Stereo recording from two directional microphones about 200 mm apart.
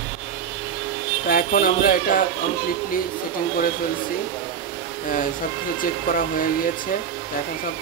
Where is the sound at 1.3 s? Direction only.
45° left (ahead or behind).